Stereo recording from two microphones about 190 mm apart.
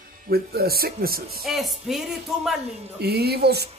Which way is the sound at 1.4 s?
Centre (ahead or behind).